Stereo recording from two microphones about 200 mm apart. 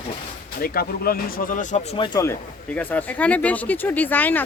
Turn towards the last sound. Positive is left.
turn(degrees=10)  # may be behind; listen again after turning